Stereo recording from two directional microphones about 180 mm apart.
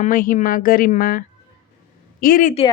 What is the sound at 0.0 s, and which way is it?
Speech, 50° left (ahead or behind).